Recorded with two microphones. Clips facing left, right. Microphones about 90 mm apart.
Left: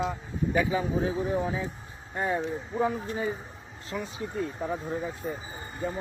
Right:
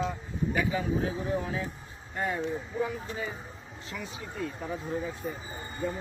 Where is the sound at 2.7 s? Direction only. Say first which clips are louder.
Left 4 dB; 35° left (ahead or behind).